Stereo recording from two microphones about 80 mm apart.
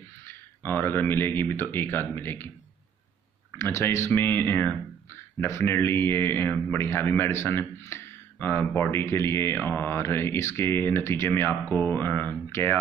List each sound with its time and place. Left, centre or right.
0.3 s speech: left
3.5 s speech: left